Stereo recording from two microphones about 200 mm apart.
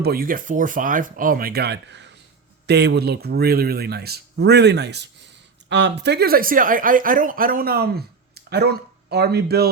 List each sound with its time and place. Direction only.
0.0 s speech: 50° right (ahead or behind)